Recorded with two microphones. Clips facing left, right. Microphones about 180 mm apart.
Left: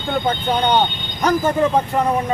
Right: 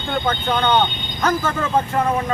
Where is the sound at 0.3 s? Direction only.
15° left (ahead or behind).